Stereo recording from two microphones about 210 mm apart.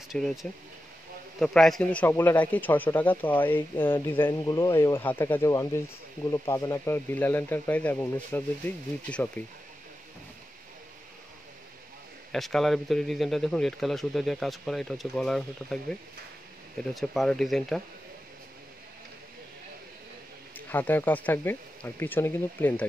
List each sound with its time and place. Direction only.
0.1 s speech: centre (ahead or behind)
12.3 s speech: centre (ahead or behind)
20.5 s speech: 10° left (ahead or behind)